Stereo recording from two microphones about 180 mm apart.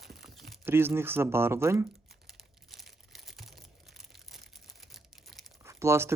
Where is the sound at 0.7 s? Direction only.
15° right (ahead or behind).